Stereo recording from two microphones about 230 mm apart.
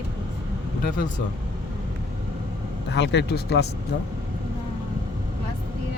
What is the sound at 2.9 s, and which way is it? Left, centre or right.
Speech, left.